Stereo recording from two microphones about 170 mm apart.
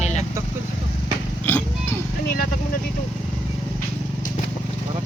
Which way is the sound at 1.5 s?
10° left (ahead or behind).